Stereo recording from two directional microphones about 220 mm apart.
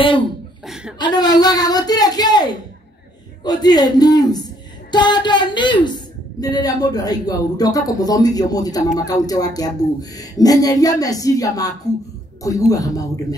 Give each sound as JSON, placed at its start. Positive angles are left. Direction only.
{"t": 0.9, "sound": "a woman's voice", "side_deg": 20}